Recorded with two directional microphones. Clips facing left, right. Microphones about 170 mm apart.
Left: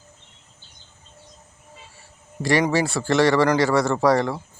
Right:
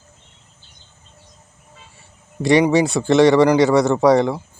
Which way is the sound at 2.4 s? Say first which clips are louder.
Right 6 dB; 20° right (ahead or behind).